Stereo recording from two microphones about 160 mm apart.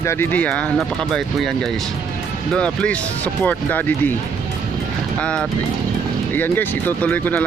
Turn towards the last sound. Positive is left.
turn(degrees=10)  # may be behind; listen again after turning